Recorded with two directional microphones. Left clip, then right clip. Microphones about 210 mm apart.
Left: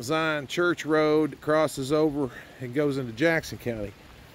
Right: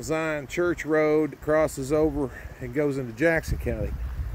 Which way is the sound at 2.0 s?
5° left (ahead or behind).